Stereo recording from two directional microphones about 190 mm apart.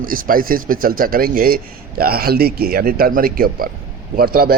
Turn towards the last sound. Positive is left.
turn(degrees=-50)  # may be behind; listen again after turning